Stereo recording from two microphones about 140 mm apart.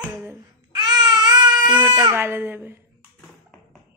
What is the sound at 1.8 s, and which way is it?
Speech, 15° right (ahead or behind).